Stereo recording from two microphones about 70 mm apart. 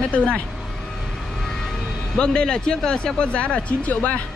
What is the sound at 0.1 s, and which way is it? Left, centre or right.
Speech, centre.